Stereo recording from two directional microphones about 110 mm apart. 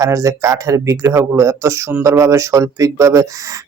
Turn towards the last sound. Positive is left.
turn(degrees=-30)  # may be behind; listen again after turning